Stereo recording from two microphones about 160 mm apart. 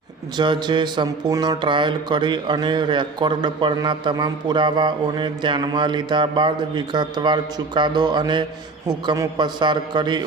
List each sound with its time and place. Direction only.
0.3 s speech: 30° right (ahead or behind)